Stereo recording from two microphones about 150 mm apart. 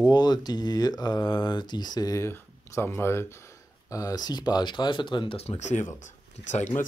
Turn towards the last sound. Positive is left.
turn(degrees=55)  # may be behind; listen again after turning